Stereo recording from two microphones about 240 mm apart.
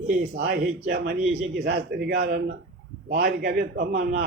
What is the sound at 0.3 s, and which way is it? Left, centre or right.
A man's voice, right.